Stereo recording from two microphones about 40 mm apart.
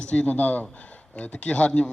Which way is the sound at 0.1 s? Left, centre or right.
Left.